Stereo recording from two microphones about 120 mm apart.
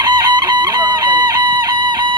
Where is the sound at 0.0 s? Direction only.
35° right (ahead or behind).